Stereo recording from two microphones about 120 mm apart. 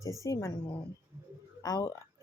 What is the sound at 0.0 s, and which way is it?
Speech, 25° left (ahead or behind).